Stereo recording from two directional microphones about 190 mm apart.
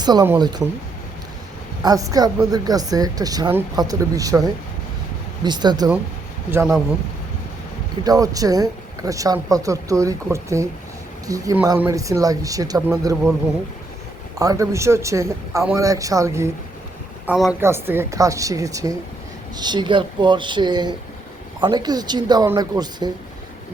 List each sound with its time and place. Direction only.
0.0 s speech: 20° right (ahead or behind)
1.8 s speech: 20° right (ahead or behind)
8.0 s speech: 20° right (ahead or behind)
14.3 s speech: 20° right (ahead or behind)
17.2 s a man's voice: 5° right (ahead or behind); by 23.1 s 20° right (ahead or behind)